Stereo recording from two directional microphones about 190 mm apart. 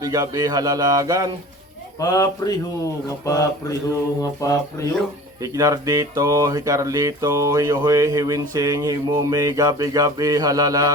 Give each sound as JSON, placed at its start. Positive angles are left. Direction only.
{"t": 0.0, "sound": "speech", "side_deg": -20}
{"t": 2.0, "sound": "speech", "side_deg": 20}
{"t": 4.2, "sound": "mantra", "side_deg": 15}
{"t": 5.4, "sound": "a sound", "side_deg": -15}